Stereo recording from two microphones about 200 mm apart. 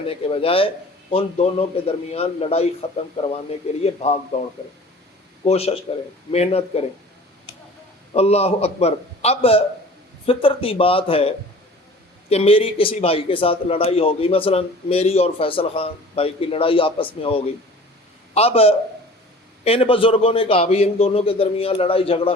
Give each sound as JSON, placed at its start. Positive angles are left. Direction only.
{"t": 0.1, "sound": "a man's voice", "side_deg": 30}
{"t": 5.5, "sound": "a man's voice", "side_deg": 30}
{"t": 8.1, "sound": "a man's voice", "side_deg": 30}